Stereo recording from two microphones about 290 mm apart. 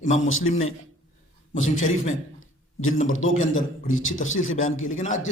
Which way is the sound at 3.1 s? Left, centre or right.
Left.